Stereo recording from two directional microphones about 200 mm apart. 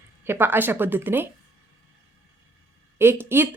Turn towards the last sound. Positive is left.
turn(degrees=-10)  # may be behind; listen again after turning